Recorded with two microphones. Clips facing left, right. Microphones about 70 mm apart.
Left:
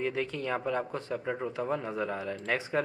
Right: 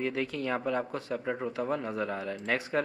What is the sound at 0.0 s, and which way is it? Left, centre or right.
Speech, centre.